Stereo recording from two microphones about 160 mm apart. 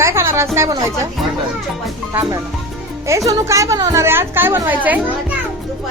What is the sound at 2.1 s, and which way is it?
Speech, 20° right (ahead or behind).